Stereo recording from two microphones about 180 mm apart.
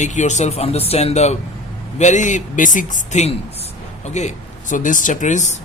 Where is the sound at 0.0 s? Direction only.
40° left (ahead or behind).